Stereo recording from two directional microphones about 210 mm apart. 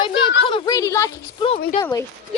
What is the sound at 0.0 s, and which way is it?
Speech, 25° left (ahead or behind).